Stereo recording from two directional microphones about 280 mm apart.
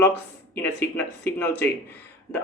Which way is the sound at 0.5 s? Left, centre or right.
Centre.